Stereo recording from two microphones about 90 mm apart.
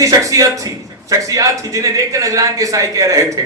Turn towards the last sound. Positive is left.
turn(degrees=-40)  # may be behind; listen again after turning